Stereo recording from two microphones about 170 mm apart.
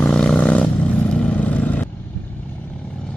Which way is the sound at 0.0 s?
5° left (ahead or behind).